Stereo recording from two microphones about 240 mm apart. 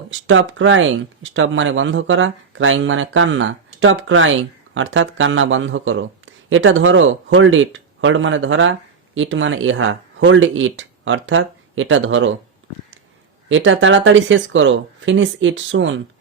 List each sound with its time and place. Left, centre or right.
0.1 s speech: right
13.5 s speech: right